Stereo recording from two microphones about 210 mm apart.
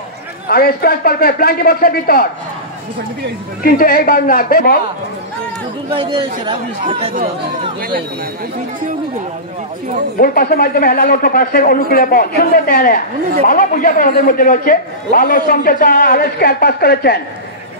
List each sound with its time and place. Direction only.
0.5 s a man's voice: 45° left (ahead or behind)
3.6 s a man's voice: 45° left (ahead or behind)
5.9 s speech: 25° right (ahead or behind)
10.1 s a man's voice: 45° left (ahead or behind)